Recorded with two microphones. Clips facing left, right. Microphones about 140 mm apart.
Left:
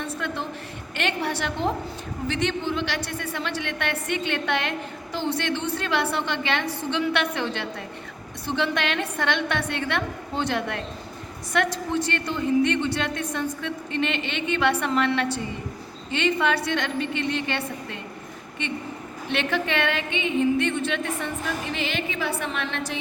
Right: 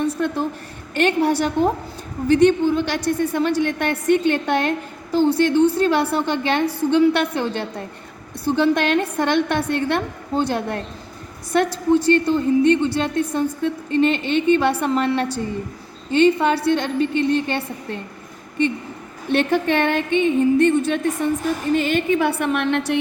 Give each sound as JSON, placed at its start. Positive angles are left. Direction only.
{"t": 0.0, "sound": "a sound", "side_deg": -40}
{"t": 0.9, "sound": "music", "side_deg": -45}
{"t": 3.6, "sound": "a woman's voice", "side_deg": -40}
{"t": 19.3, "sound": "music", "side_deg": -45}
{"t": 21.7, "sound": "a woman's voice", "side_deg": -45}